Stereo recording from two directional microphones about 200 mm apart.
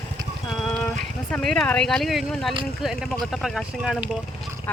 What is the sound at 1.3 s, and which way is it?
Speech, 5° left (ahead or behind).